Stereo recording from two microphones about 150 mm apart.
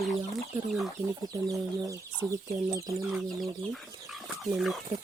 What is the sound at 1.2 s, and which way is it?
Speech, 20° right (ahead or behind).